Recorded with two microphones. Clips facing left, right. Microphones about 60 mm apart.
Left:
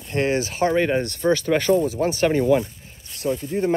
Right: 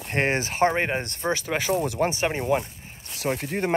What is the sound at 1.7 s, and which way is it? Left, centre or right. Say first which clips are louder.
Speech: left 4 dB; right.